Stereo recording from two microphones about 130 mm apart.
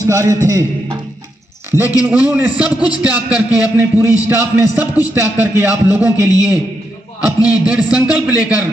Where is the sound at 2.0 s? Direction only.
10° right (ahead or behind).